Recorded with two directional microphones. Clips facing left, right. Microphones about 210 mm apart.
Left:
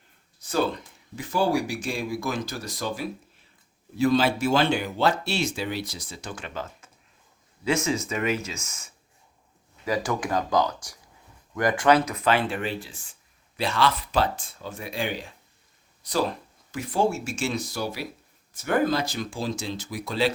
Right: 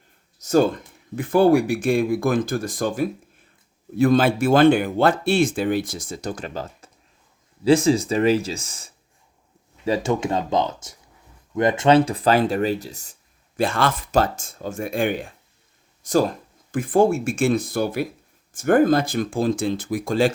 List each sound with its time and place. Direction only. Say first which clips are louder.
0.3 s speech: right 8 dB; 45° right (ahead or behind)